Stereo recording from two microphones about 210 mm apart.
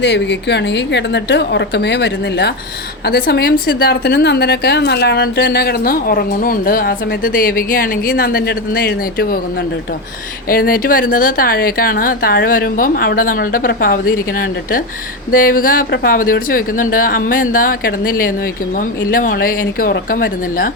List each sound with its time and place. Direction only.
0.0 s a woman's voice: 55° left (ahead or behind)
10.5 s a woman's voice: 45° left (ahead or behind)